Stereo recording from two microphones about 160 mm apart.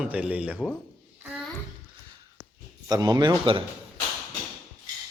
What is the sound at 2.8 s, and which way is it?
Speech, 25° right (ahead or behind).